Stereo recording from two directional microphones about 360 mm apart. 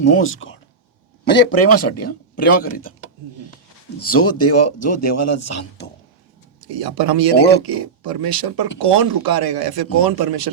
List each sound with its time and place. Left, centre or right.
0.0 s speech: left
4.0 s speech: left
6.7 s speech: right